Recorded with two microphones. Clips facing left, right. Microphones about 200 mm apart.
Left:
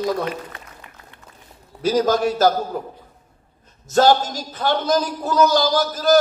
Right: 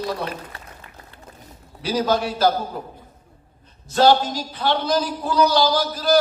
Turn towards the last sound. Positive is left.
turn(degrees=45)  # may be behind; listen again after turning